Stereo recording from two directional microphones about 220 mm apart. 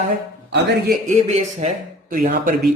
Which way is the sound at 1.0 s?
30° right (ahead or behind).